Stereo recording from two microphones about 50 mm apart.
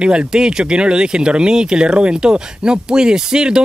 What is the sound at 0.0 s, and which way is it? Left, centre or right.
Speech, centre.